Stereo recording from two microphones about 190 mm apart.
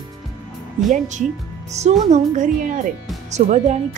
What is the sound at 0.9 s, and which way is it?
Speech, 40° right (ahead or behind).